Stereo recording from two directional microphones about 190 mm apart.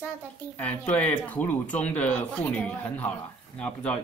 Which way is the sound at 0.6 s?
5° left (ahead or behind).